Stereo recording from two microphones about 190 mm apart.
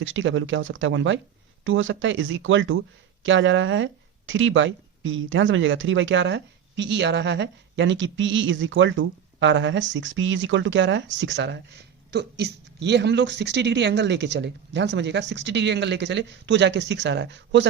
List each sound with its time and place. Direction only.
0.0 s speech: 85° right
1.6 s speech: 90° right; by 17.7 s 70° right (ahead or behind)